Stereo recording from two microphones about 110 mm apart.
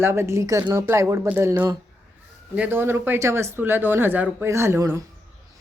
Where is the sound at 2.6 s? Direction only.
20° right (ahead or behind).